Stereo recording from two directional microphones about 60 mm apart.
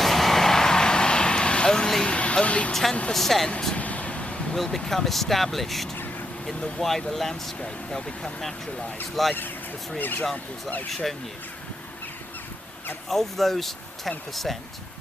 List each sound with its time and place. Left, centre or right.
0.0 s vehicle: centre
2.1 s a sound: left
3.1 s speech: centre
3.8 s vehicle: left
4.5 s speech: centre
10.0 s speech: left
13.1 s speech: centre